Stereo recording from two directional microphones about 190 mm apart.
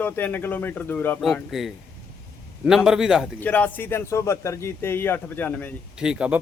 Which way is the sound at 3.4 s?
10° left (ahead or behind).